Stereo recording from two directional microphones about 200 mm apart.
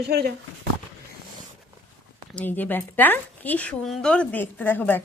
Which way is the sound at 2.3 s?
5° left (ahead or behind).